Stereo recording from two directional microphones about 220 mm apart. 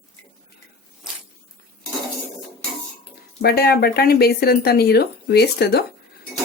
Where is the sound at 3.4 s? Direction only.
45° left (ahead or behind).